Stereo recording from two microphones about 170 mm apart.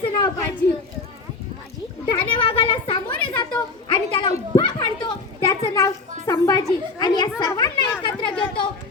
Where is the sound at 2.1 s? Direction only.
30° left (ahead or behind).